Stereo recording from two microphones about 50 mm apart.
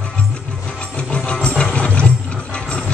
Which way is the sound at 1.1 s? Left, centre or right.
Left.